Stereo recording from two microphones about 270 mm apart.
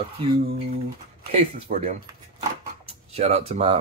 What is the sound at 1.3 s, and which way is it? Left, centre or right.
Speech, right.